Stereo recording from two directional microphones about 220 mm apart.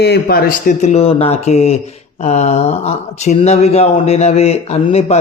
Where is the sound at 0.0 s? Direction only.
45° left (ahead or behind).